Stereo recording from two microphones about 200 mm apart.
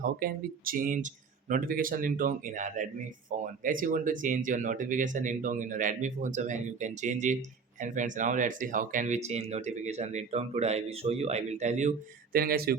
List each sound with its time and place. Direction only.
0.2 s speech: 45° right (ahead or behind)